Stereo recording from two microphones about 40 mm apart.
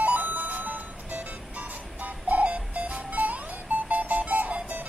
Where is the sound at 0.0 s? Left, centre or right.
Right.